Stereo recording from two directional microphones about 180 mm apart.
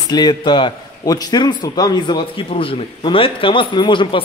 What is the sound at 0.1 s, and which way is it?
A man's voice, 25° left (ahead or behind).